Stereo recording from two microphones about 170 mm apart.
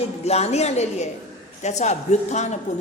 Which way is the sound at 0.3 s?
40° left (ahead or behind).